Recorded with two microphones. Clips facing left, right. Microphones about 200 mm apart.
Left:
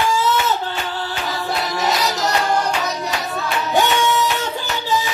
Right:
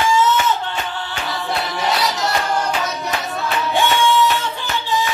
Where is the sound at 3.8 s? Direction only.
45° left (ahead or behind).